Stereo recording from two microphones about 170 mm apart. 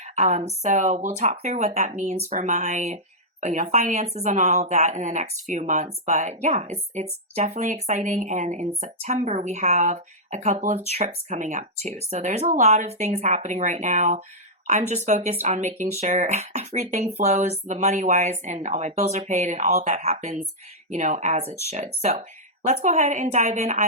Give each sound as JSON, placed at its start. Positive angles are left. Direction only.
{"t": 0.0, "sound": "speech", "side_deg": -40}